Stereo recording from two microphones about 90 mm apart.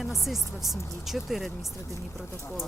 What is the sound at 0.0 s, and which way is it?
Speech, centre (ahead or behind).